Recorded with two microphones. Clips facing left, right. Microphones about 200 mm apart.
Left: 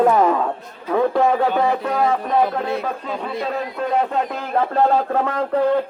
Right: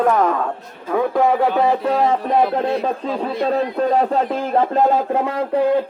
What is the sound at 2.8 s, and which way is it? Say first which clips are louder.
A man's voice: right 4 dB; 30° right (ahead or behind).